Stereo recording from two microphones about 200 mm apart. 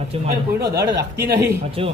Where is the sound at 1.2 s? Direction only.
55° right (ahead or behind).